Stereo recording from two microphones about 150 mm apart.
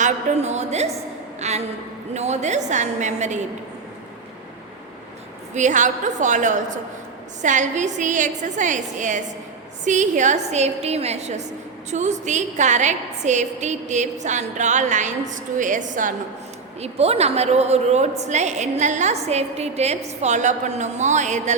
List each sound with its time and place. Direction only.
0.0 s a woman's voice: 50° right (ahead or behind)
5.5 s a woman's voice: 55° right (ahead or behind)
16.8 s a woman's voice: 45° right (ahead or behind)